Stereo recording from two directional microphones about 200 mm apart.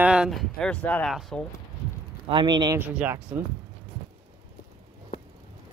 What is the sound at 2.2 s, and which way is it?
Speech, 25° right (ahead or behind).